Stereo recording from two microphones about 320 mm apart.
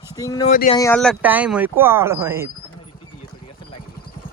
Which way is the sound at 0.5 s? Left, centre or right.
Left.